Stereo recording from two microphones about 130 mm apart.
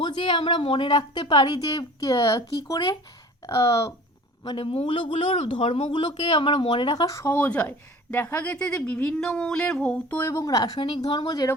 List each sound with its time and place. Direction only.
0.0 s speech: 35° left (ahead or behind)
4.4 s speech: 45° left (ahead or behind)